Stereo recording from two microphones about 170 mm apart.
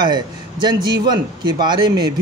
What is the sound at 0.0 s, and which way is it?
Speech, 25° right (ahead or behind).